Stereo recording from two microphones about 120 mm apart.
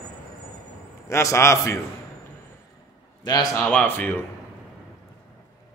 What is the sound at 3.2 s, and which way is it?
Speech, 35° left (ahead or behind).